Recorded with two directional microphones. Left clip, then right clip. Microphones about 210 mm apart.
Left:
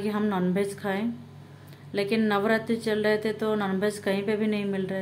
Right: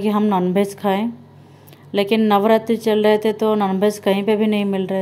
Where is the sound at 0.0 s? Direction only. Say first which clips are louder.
Right 9 dB; 30° right (ahead or behind).